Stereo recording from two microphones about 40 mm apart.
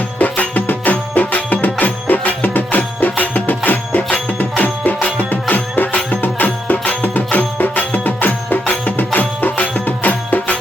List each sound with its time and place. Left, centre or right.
0.2 s music: left